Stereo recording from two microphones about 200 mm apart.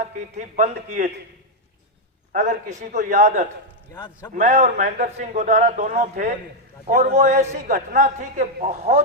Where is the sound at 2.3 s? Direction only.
35° right (ahead or behind).